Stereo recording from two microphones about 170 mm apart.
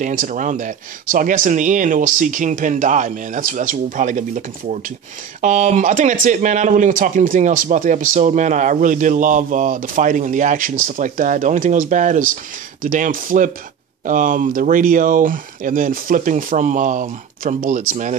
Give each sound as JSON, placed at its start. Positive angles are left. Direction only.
{"t": 0.0, "sound": "speech", "side_deg": -50}